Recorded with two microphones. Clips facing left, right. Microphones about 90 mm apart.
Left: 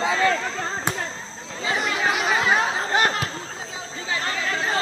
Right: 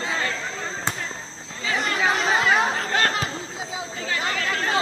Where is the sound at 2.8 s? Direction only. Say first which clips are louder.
Left 2 dB; 20° left (ahead or behind).